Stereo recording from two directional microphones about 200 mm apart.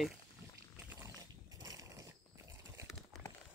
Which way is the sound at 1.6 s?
20° right (ahead or behind).